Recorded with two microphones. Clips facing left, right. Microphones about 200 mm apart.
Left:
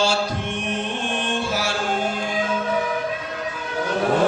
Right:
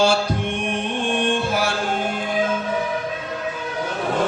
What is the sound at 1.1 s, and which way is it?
Music, 55° right (ahead or behind).